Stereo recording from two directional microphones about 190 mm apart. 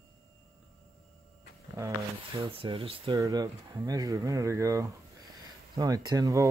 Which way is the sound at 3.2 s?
20° right (ahead or behind).